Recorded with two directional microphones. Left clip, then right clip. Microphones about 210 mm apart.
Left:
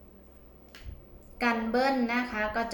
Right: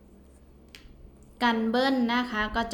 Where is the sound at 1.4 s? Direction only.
30° right (ahead or behind).